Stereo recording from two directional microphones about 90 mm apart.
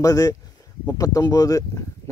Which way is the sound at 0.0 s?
40° left (ahead or behind).